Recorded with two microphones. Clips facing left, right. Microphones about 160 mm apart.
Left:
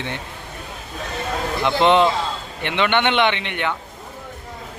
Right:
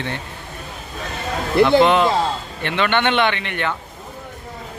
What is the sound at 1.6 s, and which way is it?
A man's voice, 25° left (ahead or behind).